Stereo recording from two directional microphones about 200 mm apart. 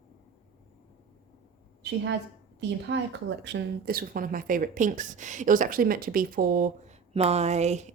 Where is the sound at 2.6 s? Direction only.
60° right (ahead or behind).